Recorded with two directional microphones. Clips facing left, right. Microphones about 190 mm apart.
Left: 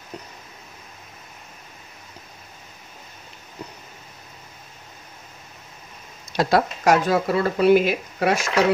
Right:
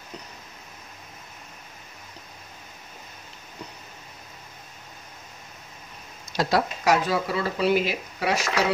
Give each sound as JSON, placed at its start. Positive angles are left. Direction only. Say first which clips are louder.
{"t": 6.3, "sound": "speech", "louder": "left 4 dB", "side_deg": 55}